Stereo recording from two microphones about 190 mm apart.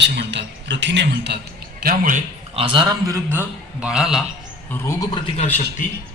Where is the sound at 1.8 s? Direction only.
50° right (ahead or behind).